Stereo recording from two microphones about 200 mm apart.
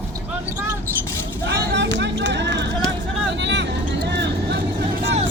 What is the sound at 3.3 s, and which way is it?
Vehicle, 60° right (ahead or behind).